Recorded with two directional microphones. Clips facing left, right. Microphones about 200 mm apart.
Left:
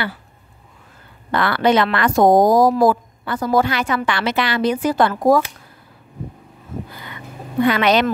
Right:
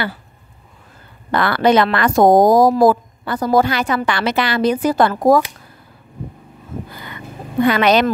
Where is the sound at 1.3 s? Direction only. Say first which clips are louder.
Right 2 dB; 40° right (ahead or behind).